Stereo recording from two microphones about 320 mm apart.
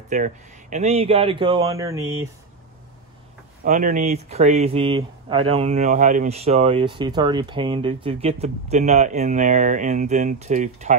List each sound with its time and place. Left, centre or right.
0.1 s a man's voice: right
3.6 s speech: right